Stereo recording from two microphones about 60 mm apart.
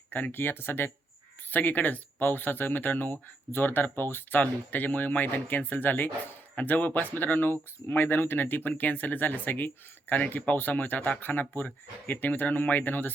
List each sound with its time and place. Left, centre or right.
0.1 s speech: left